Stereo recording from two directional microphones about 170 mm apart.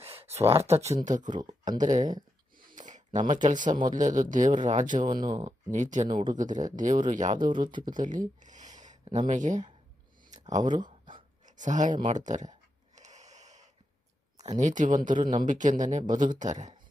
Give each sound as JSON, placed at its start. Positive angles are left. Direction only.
{"t": 0.0, "sound": "a sound", "side_deg": -35}
{"t": 1.0, "sound": "speech", "side_deg": -50}
{"t": 1.3, "sound": "speech", "side_deg": -25}
{"t": 1.6, "sound": "speech", "side_deg": -50}
{"t": 2.6, "sound": "a sound", "side_deg": -50}
{"t": 3.8, "sound": "speech", "side_deg": -50}
{"t": 5.0, "sound": "speech", "side_deg": -25}
{"t": 5.3, "sound": "speech", "side_deg": -40}
{"t": 7.5, "sound": "speech", "side_deg": -25}
{"t": 7.9, "sound": "speech", "side_deg": -50}
{"t": 10.8, "sound": "a sound", "side_deg": -25}
{"t": 11.4, "sound": "speech", "side_deg": -45}
{"t": 13.0, "sound": "a sound", "side_deg": -45}
{"t": 14.4, "sound": "speech", "side_deg": -45}